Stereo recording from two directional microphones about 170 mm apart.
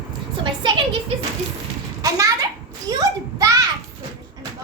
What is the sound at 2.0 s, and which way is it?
A child's voice, 20° right (ahead or behind).